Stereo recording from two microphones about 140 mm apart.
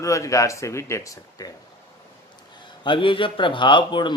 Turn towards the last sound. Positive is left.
turn(degrees=35)  # may be behind; listen again after turning